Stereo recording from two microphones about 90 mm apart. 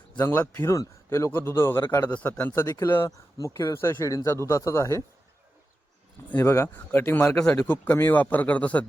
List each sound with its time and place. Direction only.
0.3 s a man's voice: 25° left (ahead or behind)
2.0 s a man's voice: 15° left (ahead or behind)
2.6 s a man's voice: 30° left (ahead or behind)
6.3 s a man's voice: 25° left (ahead or behind)
7.3 s a man's voice: 5° left (ahead or behind)
7.6 s a man's voice: 20° left (ahead or behind)